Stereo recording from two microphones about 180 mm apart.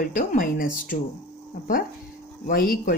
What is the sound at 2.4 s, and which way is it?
Speech, 50° left (ahead or behind).